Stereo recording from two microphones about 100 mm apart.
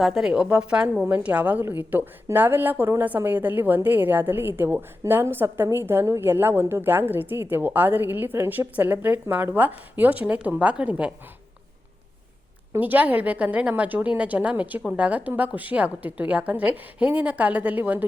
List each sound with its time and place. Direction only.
0.0 s a woman's voice: centre (ahead or behind)
12.7 s a woman's voice: 20° right (ahead or behind)